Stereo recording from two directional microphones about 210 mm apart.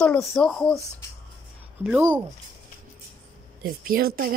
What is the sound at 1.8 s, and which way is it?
Speech, 5° right (ahead or behind).